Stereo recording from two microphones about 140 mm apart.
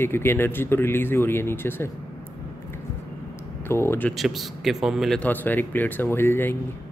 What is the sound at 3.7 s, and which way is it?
Speech, 15° left (ahead or behind).